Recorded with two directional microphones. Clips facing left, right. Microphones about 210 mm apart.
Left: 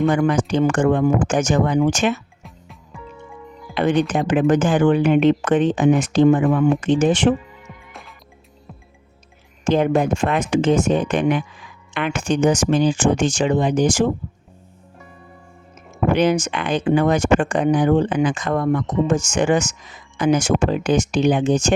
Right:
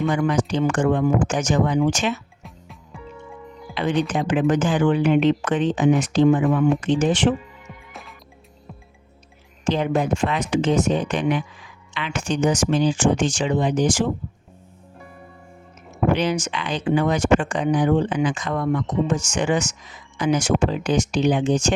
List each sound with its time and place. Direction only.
0.0 s speech: 55° left (ahead or behind)
2.4 s music: centre (ahead or behind)
3.8 s speech: 55° left (ahead or behind)
9.6 s speech: 50° left (ahead or behind)
16.1 s speech: 50° left (ahead or behind)